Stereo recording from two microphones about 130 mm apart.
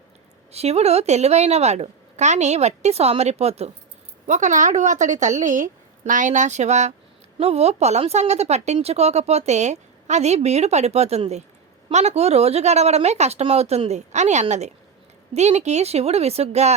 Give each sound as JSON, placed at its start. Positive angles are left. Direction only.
{"t": 0.5, "sound": "speech", "side_deg": -55}
{"t": 4.3, "sound": "a woman's voice", "side_deg": -70}